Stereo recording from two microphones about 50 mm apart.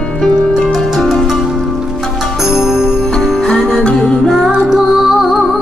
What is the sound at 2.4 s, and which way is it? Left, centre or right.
Music, centre.